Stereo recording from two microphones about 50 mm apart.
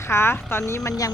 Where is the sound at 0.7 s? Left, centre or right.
Left.